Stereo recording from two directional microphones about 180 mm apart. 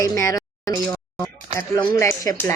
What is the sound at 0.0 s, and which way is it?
Speech, 15° left (ahead or behind).